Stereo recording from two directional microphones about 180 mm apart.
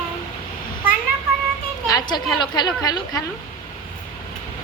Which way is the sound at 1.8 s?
20° left (ahead or behind).